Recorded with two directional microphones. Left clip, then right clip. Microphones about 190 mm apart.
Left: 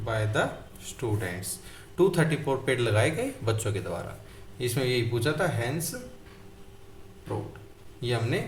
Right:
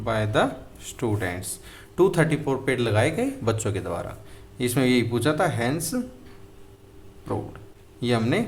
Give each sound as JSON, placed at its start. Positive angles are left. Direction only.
{"t": 0.0, "sound": "speech", "side_deg": -35}
{"t": 8.0, "sound": "speech", "side_deg": -35}